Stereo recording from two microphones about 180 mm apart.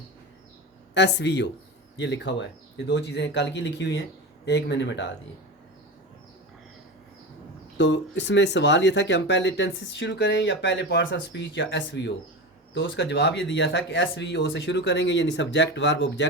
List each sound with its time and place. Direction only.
0.9 s speech: 75° left (ahead or behind)
7.8 s speech: 75° left (ahead or behind)